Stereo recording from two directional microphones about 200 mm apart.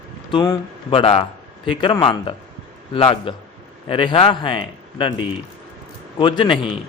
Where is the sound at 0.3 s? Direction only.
20° left (ahead or behind).